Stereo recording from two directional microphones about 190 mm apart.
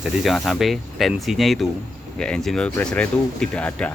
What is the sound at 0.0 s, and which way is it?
Speech, centre (ahead or behind).